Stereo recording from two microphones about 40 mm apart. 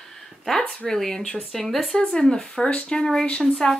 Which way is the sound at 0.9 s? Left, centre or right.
Centre.